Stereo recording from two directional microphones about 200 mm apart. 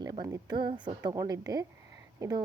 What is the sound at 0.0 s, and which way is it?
A woman's voice, 20° right (ahead or behind).